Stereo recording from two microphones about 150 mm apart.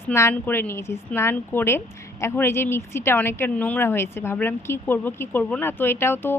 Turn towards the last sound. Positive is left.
turn(degrees=15)  # may be behind; listen again after turning